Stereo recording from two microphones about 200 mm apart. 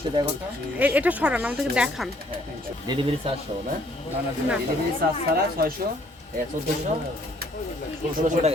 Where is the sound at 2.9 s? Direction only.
20° right (ahead or behind).